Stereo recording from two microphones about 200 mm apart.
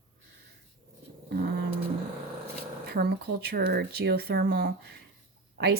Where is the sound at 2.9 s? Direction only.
50° right (ahead or behind).